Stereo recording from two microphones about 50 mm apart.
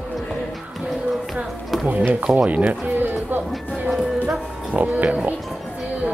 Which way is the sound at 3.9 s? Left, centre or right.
Centre.